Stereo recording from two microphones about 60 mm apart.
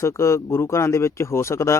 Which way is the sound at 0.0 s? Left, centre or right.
Left.